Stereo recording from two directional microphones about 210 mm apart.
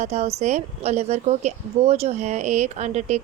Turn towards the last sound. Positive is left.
turn(degrees=-35)  # may be behind; listen again after turning